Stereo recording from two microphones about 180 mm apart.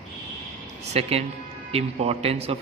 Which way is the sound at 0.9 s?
35° right (ahead or behind).